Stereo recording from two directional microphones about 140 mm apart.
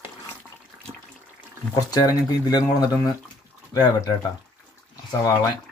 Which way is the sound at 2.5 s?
30° left (ahead or behind).